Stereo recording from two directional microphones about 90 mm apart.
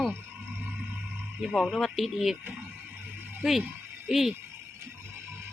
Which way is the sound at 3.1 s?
20° right (ahead or behind).